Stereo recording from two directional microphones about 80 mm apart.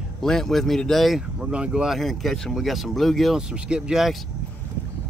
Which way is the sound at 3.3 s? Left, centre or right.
Centre.